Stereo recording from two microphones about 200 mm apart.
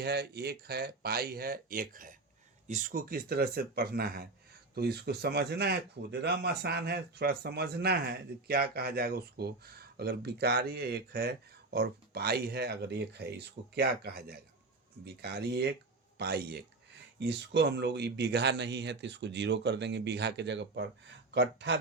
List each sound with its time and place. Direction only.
0.0 s speech: 55° right (ahead or behind)